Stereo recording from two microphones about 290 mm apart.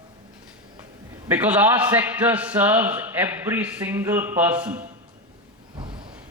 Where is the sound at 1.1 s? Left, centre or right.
Centre.